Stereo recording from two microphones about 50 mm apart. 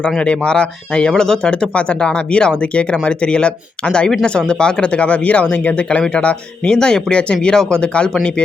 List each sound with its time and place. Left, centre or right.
0.2 s speech: left